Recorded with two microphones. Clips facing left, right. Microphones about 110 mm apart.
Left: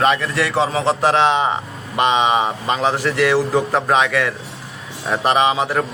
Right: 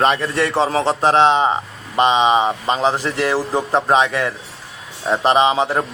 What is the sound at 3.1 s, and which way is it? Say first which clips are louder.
A man's voice: left 3 dB; 35° right (ahead or behind).